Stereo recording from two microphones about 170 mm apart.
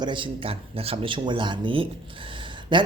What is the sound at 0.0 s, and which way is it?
Speech, 30° right (ahead or behind).